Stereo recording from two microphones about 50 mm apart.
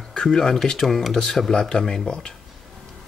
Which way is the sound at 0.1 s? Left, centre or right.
Centre.